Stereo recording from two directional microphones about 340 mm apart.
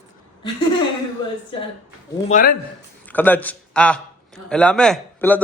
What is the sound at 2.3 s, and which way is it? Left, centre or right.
Speech, left.